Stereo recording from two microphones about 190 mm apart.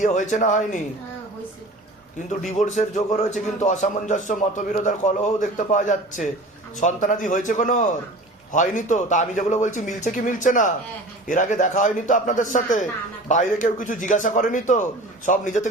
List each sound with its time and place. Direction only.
0.0 s a man's voice: 40° left (ahead or behind)
2.5 s a man's voice: 40° left (ahead or behind)